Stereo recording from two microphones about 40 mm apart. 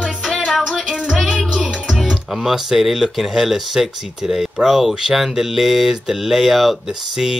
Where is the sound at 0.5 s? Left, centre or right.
Centre.